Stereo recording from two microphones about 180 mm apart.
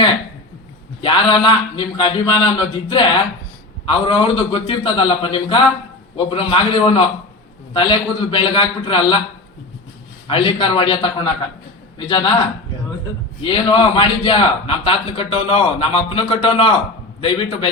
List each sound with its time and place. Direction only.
1.0 s a man's voice: 25° left (ahead or behind)
10.2 s a man's voice: 30° left (ahead or behind)
13.4 s a man's voice: 25° left (ahead or behind)